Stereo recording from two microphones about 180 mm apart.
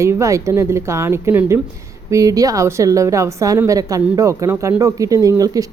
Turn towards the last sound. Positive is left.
turn(degrees=-20)  # may be behind; listen again after turning